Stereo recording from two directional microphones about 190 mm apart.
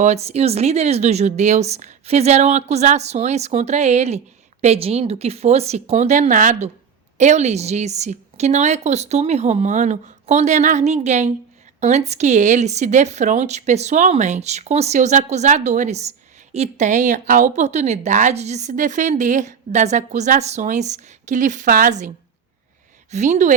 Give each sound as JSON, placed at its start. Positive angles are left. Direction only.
{"t": 0.0, "sound": "speech", "side_deg": -35}
{"t": 23.1, "sound": "speech", "side_deg": -40}